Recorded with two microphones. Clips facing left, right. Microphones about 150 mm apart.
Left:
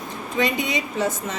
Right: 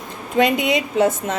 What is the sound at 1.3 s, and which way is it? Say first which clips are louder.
Speech: right 6 dB; 60° right (ahead or behind).